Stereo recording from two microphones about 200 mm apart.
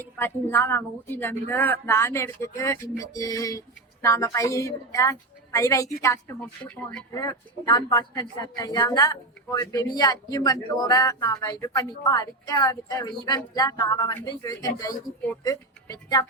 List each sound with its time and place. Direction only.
0.0 s a woman's voice: 10° left (ahead or behind)